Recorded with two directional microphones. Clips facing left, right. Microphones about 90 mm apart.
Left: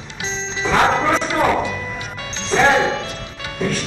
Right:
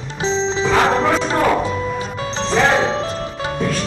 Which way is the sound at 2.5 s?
35° right (ahead or behind).